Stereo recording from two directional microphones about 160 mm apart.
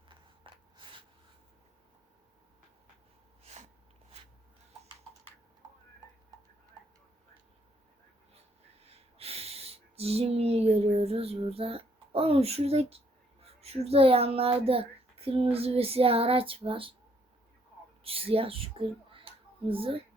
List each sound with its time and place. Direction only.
0.1 s a sound: 30° right (ahead or behind)
3.4 s snort: 45° right (ahead or behind)
8.8 s a sound: 40° right (ahead or behind)
13.4 s speech: 40° right (ahead or behind)
15.5 s child singing: 35° right (ahead or behind)
18.0 s speech: 35° right (ahead or behind)